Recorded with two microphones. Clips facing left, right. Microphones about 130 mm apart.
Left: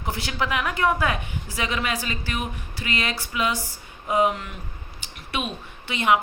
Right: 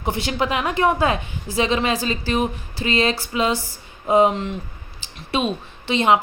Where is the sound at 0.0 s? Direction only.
25° right (ahead or behind).